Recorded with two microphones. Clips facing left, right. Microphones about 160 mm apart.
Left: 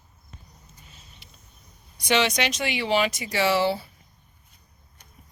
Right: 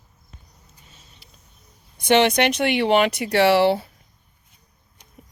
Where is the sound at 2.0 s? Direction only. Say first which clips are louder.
Right 6 dB; 55° right (ahead or behind).